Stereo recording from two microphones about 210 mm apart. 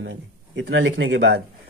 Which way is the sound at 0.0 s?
65° right (ahead or behind).